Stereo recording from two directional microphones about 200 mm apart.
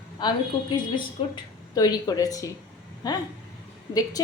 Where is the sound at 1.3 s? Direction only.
20° left (ahead or behind).